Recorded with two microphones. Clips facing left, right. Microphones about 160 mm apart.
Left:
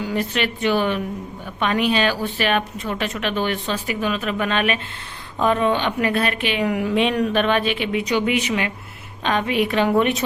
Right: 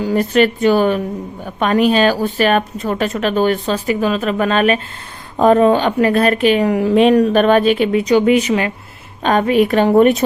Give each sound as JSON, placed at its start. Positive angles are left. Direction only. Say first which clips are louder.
{"t": 0.0, "sound": "a woman's voice", "louder": "right 9 dB", "side_deg": -40}